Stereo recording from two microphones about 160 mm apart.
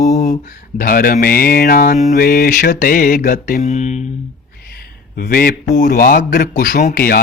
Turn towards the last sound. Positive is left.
turn(degrees=70)  # may be behind; listen again after turning